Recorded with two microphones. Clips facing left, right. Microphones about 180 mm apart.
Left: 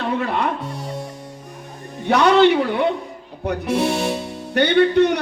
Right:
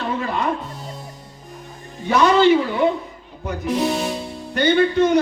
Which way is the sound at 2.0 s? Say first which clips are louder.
Left 1 dB; 70° left (ahead or behind).